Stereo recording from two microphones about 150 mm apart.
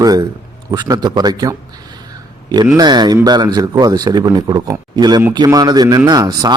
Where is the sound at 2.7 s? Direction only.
30° right (ahead or behind).